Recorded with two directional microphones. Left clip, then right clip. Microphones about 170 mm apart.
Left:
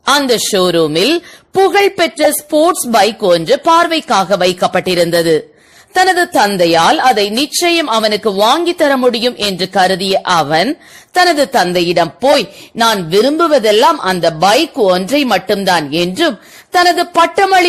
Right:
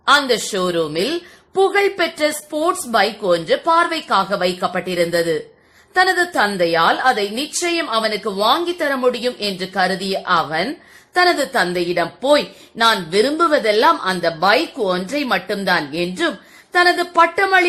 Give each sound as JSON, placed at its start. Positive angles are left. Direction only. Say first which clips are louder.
{"t": 0.0, "sound": "speech", "louder": "left 3 dB", "side_deg": 40}